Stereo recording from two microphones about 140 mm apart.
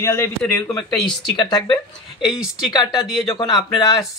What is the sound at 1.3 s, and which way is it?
Speech, 35° left (ahead or behind).